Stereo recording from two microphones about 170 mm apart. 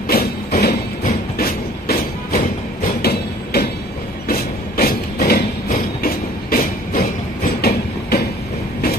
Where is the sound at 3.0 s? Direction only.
70° left (ahead or behind).